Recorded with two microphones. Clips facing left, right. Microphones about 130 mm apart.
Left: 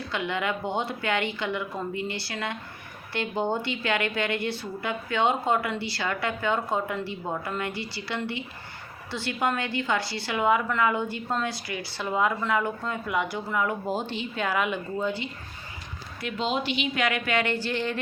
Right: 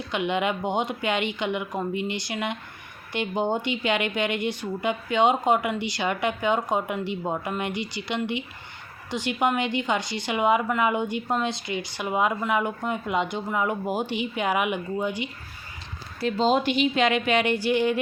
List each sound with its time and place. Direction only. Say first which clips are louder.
0.1 s a woman's voice: right 4 dB; 20° right (ahead or behind)
16.2 s speech: right 6 dB; 40° right (ahead or behind)
16.9 s a woman's voice: right 4 dB; 25° right (ahead or behind)